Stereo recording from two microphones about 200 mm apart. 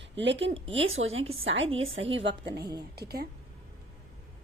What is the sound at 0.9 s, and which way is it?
A woman's voice, 80° right.